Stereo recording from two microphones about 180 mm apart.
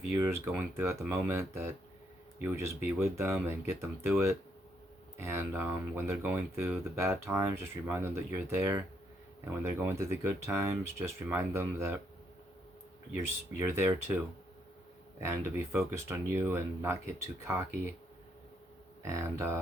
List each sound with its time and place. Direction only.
0.4 s speech: 10° right (ahead or behind)
13.6 s speech: 10° right (ahead or behind)
15.2 s speech: 15° right (ahead or behind)
19.0 s speech: 15° right (ahead or behind)